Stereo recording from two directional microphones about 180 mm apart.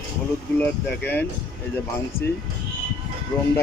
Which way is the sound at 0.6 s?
10° left (ahead or behind).